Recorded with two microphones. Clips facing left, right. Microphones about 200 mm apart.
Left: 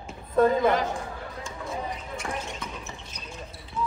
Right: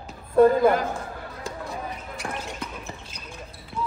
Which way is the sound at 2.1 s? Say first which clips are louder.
Right 2 dB; 30° right (ahead or behind).